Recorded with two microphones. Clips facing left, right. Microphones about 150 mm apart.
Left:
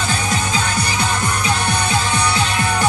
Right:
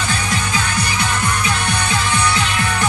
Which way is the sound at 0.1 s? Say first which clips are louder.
Left 1 dB; 30° left (ahead or behind).